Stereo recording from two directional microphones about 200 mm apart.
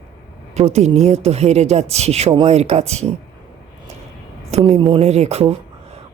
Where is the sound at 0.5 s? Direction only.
35° right (ahead or behind).